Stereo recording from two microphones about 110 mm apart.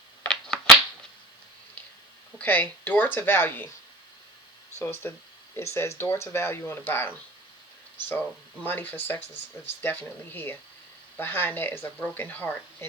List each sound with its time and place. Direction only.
0.3 s a sound: 5° left (ahead or behind)
2.4 s speech: 15° left (ahead or behind)
4.8 s speech: 20° left (ahead or behind)
8.6 s speech: 15° left (ahead or behind)